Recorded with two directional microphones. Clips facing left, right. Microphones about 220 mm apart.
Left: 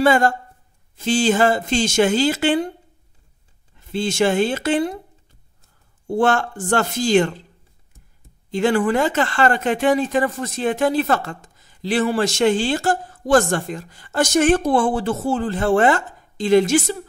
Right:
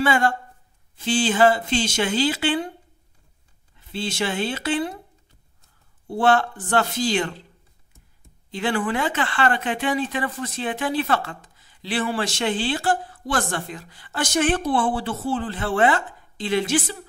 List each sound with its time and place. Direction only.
0.0 s speech: 40° left (ahead or behind)
3.9 s speech: 45° left (ahead or behind)
6.0 s speech: 45° left (ahead or behind)
8.5 s speech: 45° left (ahead or behind)